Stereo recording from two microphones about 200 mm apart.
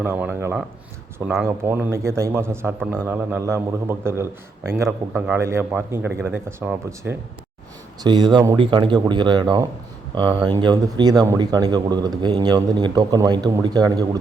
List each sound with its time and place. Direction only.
0.0 s a man's voice: 10° right (ahead or behind)
8.0 s a man's voice: 20° right (ahead or behind)